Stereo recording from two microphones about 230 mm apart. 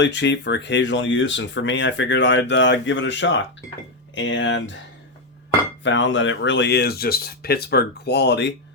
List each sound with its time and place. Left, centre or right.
0.0 s speech: left
5.8 s speech: left